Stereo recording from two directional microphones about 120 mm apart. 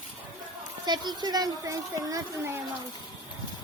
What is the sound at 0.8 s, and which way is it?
A woman's voice, 35° right (ahead or behind).